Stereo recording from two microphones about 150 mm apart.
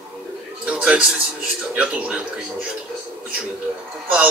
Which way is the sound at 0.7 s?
5° right (ahead or behind).